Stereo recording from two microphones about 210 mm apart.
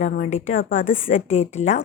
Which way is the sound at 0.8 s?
65° left (ahead or behind).